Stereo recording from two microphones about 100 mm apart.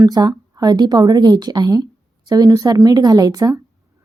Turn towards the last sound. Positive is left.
turn(degrees=-40)  # may be behind; listen again after turning